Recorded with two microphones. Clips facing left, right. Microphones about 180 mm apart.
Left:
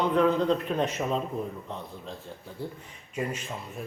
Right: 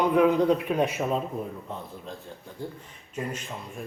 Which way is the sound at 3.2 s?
10° left (ahead or behind).